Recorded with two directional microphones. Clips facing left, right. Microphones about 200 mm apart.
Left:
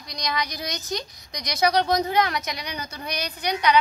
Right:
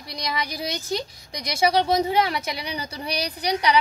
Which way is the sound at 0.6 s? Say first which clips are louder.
Right 3 dB; 30° right (ahead or behind).